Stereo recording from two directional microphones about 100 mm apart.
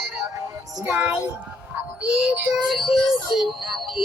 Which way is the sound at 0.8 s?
15° right (ahead or behind).